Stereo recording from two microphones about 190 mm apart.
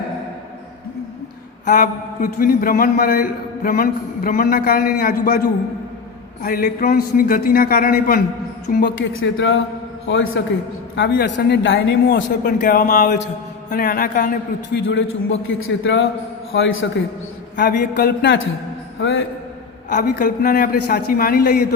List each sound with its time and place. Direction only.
1.6 s a man's voice: 45° left (ahead or behind)
6.4 s a man's voice: 50° left (ahead or behind)
9.2 s a man's voice: 80° left
10.9 s speech: 60° left (ahead or behind)
12.5 s a man's voice: 45° left (ahead or behind)
14.8 s a man's voice: 85° left
17.6 s speech: 50° left (ahead or behind)
19.9 s a man's voice: 45° left (ahead or behind)